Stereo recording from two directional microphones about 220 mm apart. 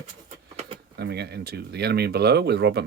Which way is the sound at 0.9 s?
50° right (ahead or behind).